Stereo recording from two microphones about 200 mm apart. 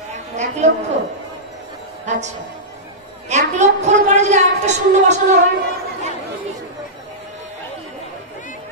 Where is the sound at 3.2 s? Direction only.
35° right (ahead or behind).